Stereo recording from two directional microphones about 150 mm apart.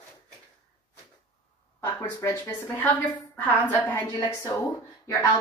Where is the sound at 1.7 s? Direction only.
15° left (ahead or behind).